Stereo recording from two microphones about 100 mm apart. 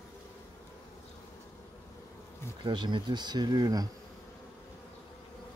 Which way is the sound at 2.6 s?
50° right (ahead or behind).